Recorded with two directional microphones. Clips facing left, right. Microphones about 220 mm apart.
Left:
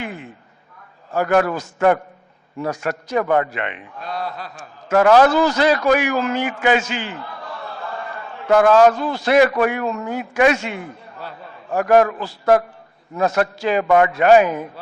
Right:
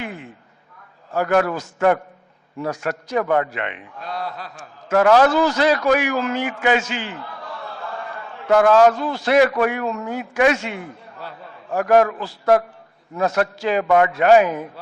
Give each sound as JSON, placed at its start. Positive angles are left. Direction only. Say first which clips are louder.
{"t": 1.1, "sound": "a man's voice", "louder": "left 1 dB", "side_deg": 15}